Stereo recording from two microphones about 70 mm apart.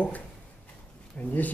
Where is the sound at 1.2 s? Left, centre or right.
Left.